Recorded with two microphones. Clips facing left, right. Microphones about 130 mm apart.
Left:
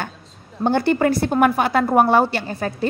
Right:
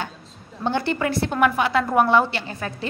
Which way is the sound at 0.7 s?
45° left (ahead or behind).